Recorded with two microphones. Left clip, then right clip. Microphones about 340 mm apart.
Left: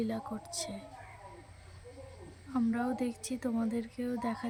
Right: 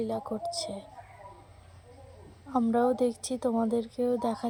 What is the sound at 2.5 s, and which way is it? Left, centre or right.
Speech, right.